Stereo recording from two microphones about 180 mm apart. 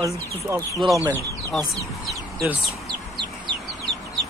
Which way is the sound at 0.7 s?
Centre (ahead or behind).